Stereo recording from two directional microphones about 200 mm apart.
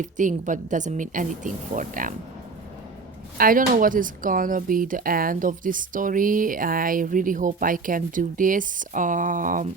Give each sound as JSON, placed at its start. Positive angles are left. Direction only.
{"t": 0.0, "sound": "a woman's voice", "side_deg": -40}
{"t": 3.3, "sound": "speech", "side_deg": -45}